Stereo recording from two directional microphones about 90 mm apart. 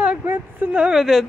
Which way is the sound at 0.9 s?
5° right (ahead or behind).